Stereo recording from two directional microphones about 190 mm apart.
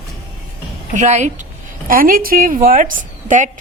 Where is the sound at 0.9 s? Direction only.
40° right (ahead or behind).